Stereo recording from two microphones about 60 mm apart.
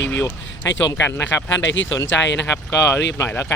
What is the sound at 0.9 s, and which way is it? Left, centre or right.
Speech, left.